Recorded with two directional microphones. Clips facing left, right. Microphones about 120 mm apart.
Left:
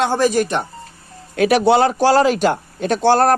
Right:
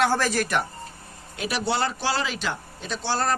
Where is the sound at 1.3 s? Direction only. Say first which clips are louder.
Left 13 dB; 60° left (ahead or behind).